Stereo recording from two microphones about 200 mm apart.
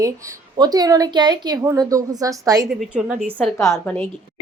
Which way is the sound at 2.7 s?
5° right (ahead or behind).